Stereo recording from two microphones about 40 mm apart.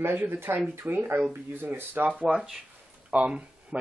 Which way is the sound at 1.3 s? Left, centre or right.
Right.